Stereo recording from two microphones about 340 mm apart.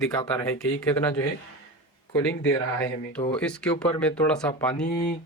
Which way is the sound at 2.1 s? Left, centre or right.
Centre.